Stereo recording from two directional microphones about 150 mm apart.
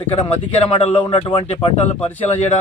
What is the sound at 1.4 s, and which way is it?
Speech, 45° left (ahead or behind).